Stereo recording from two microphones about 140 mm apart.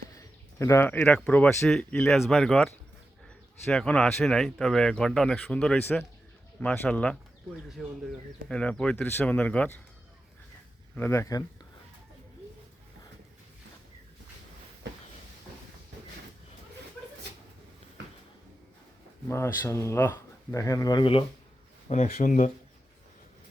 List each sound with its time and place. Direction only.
0.2 s a sound: 20° left (ahead or behind)
0.9 s speech: 10° left (ahead or behind)
10.9 s speech: 15° left (ahead or behind)
19.3 s speech: 20° left (ahead or behind); by 21.2 s 40° left (ahead or behind)
21.8 s speech: 50° left (ahead or behind)
22.1 s speech: 65° left (ahead or behind)